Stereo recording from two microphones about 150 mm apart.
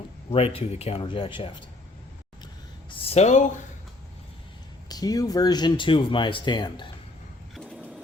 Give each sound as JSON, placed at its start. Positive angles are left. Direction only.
{"t": 0.3, "sound": "speech", "side_deg": 40}
{"t": 2.9, "sound": "a sound", "side_deg": 40}
{"t": 4.9, "sound": "speech", "side_deg": 25}
{"t": 7.5, "sound": "vehicle", "side_deg": 5}